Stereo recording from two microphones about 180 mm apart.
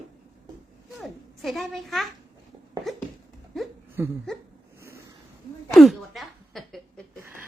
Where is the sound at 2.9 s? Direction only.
Centre (ahead or behind).